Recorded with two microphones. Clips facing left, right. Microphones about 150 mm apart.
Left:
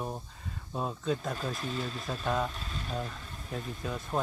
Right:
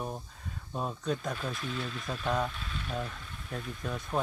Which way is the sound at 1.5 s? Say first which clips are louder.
Left 1 dB; 40° left (ahead or behind).